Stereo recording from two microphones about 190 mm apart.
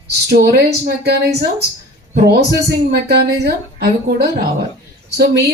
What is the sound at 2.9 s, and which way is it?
Speech, 60° right (ahead or behind).